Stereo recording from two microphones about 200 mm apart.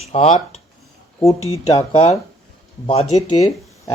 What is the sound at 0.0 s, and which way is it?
Speech, 30° left (ahead or behind).